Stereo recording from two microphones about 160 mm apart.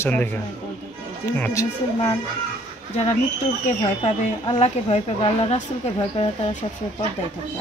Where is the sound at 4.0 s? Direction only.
35° left (ahead or behind).